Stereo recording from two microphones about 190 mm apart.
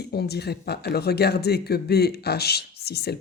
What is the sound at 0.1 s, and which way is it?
Speech, 60° left (ahead or behind).